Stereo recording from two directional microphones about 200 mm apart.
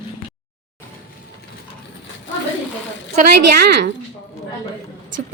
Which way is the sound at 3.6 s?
55° right (ahead or behind).